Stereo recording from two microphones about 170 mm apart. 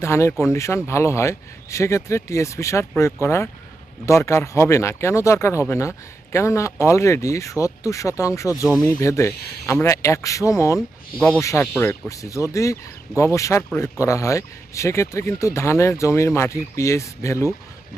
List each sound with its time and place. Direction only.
0.0 s speech: 15° left (ahead or behind)
11.2 s speech: 5° left (ahead or behind)